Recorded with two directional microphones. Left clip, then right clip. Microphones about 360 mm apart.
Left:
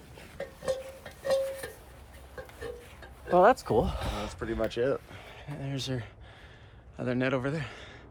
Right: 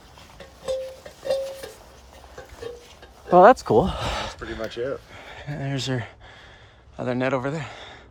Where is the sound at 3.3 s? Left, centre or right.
Right.